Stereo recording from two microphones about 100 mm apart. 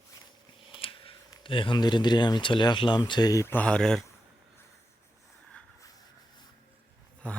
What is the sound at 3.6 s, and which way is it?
Speech, 10° left (ahead or behind).